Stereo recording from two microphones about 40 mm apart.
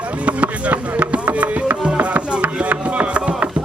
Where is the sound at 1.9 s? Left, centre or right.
Right.